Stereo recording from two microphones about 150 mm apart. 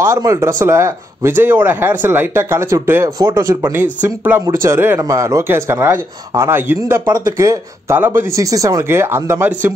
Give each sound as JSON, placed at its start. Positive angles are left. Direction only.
{"t": 0.0, "sound": "speech", "side_deg": -20}